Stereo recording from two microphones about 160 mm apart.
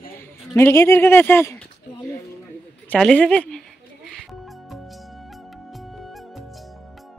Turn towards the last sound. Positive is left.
turn(degrees=0)  # may be behind; listen again after turning